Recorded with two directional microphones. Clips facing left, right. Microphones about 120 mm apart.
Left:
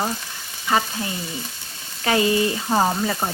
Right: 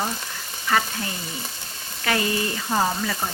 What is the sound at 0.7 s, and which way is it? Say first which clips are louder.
Frying: left 2 dB; 20° left (ahead or behind).